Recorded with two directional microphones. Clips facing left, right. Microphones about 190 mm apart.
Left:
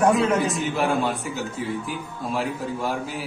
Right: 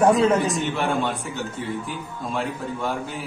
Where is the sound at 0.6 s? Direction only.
5° left (ahead or behind).